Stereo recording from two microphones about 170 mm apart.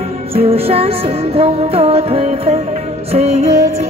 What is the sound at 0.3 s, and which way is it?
Music, 35° right (ahead or behind).